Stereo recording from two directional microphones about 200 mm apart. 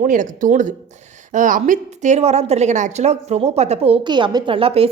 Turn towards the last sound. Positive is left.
turn(degrees=-30)  # may be behind; listen again after turning